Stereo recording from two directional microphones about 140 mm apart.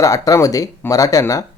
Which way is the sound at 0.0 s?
25° left (ahead or behind).